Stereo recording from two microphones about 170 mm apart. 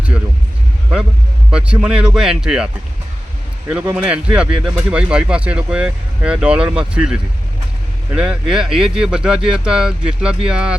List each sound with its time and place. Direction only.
1.5 s speech: 5° right (ahead or behind)
3.7 s speech: 5° right (ahead or behind)